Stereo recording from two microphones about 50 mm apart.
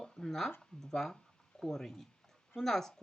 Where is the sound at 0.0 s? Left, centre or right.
Centre.